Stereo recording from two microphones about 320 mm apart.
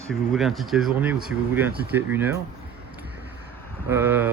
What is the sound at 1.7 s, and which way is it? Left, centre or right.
Speech, right.